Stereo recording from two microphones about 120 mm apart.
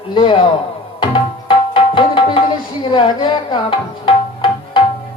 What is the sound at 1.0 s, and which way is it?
Tabla, 45° left (ahead or behind).